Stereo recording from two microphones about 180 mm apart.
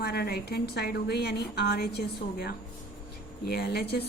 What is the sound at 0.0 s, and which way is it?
A woman's voice, 60° left (ahead or behind).